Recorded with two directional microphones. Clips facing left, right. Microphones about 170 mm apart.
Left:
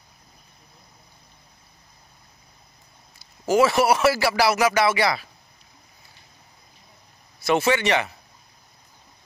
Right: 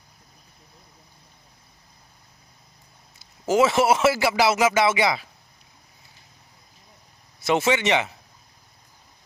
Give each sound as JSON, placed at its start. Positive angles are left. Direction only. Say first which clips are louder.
{"t": 3.4, "sound": "speech", "louder": "even", "side_deg": -20}
{"t": 7.3, "sound": "speech", "louder": "left 1 dB", "side_deg": -20}